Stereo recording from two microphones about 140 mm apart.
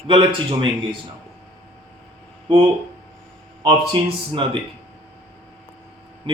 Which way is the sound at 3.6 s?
35° right (ahead or behind).